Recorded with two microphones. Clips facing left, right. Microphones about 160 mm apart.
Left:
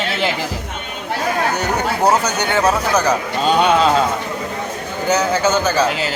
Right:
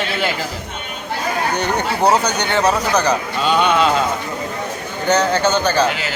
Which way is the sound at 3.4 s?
40° left (ahead or behind).